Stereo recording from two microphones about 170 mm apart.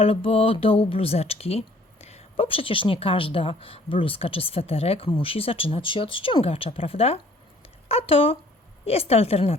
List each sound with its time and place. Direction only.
0.0 s speech: 35° left (ahead or behind)